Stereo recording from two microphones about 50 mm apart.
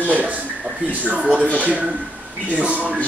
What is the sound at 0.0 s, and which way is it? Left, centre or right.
Speech, right.